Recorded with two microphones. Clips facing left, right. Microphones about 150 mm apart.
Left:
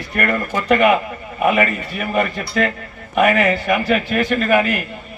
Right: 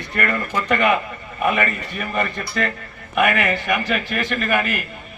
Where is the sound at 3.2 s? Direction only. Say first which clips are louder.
Left 4 dB; 40° left (ahead or behind).